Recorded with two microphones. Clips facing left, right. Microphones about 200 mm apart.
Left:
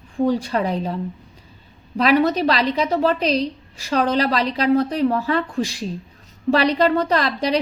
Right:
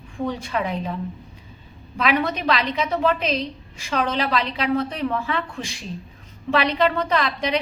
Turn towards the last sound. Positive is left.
turn(degrees=40)  # may be behind; listen again after turning